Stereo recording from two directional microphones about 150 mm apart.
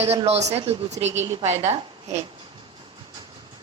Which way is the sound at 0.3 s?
45° right (ahead or behind).